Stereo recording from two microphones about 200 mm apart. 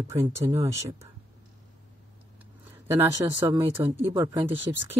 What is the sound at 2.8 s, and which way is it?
Speech, 10° right (ahead or behind).